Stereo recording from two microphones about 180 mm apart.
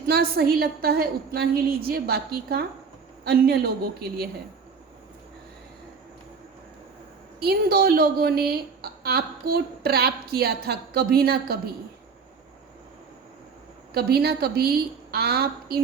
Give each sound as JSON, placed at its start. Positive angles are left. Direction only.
{"t": 0.1, "sound": "a woman's voice", "side_deg": -60}
{"t": 7.3, "sound": "a woman's voice", "side_deg": -60}
{"t": 13.9, "sound": "a woman's voice", "side_deg": -60}